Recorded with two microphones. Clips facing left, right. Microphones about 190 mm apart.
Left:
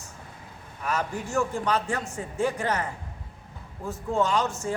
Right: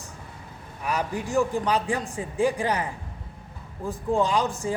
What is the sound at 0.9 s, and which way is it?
A man's voice, 15° right (ahead or behind).